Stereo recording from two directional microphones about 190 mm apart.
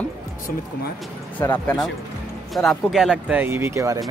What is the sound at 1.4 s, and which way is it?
Speech, 15° left (ahead or behind).